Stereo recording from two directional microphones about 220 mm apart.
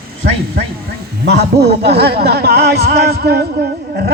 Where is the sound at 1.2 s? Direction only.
50° right (ahead or behind).